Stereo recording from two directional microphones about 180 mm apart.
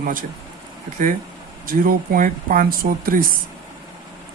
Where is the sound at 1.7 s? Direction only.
55° right (ahead or behind).